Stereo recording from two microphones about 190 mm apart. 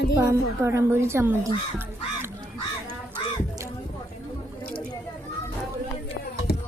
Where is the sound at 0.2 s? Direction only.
15° right (ahead or behind).